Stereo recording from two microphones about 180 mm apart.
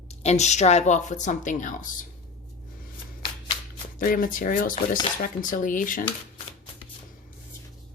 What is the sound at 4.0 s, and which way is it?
Speech, 50° left (ahead or behind).